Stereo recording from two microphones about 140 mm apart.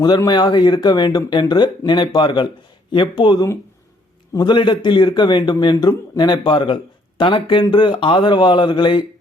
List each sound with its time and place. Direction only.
0.0 s a man's voice: 30° left (ahead or behind)